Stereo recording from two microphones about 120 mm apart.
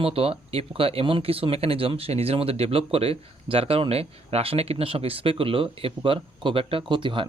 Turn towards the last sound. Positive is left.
turn(degrees=-45)  # may be behind; listen again after turning